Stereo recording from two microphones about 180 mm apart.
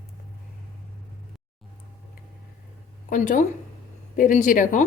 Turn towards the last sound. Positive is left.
turn(degrees=45)  # may be behind; listen again after turning